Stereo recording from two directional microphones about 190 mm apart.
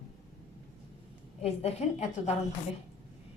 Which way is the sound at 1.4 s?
35° left (ahead or behind).